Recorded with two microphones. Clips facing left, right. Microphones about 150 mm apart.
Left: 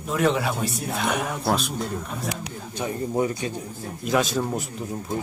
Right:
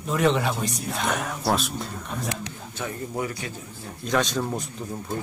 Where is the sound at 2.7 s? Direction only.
20° left (ahead or behind).